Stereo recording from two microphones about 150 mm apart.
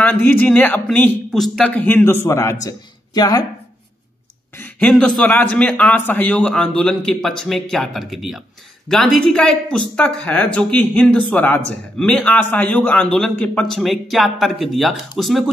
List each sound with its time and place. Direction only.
0.0 s speech: 10° left (ahead or behind)
4.6 s a man's voice: 5° left (ahead or behind)